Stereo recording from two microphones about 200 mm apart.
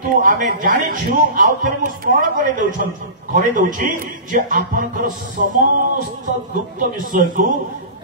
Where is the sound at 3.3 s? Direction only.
40° right (ahead or behind).